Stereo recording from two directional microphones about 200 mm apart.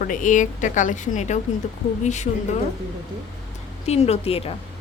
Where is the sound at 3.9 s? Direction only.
30° left (ahead or behind).